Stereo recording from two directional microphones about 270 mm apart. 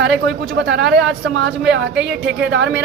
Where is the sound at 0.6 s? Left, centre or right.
Right.